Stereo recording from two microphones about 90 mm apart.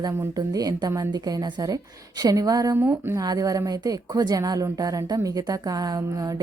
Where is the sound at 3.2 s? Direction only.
45° right (ahead or behind).